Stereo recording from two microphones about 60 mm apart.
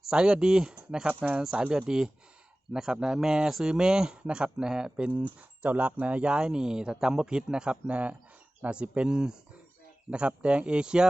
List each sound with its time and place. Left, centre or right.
0.1 s speech: centre
1.0 s speech: right
1.4 s speech: centre